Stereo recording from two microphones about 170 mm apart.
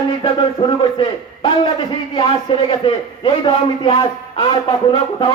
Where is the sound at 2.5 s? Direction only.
30° left (ahead or behind).